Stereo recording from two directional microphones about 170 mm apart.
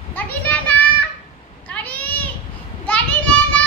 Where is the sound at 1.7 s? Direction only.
10° left (ahead or behind).